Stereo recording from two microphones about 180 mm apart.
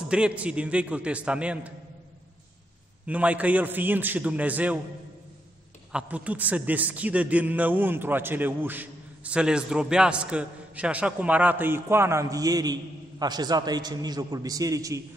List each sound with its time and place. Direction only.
0.1 s a man's voice: 5° right (ahead or behind)
3.1 s a man's voice: 10° right (ahead or behind)
5.9 s a man's voice: 5° right (ahead or behind)